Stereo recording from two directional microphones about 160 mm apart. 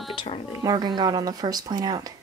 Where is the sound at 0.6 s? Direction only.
25° right (ahead or behind).